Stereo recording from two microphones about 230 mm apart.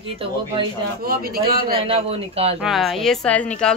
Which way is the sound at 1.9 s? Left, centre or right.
Right.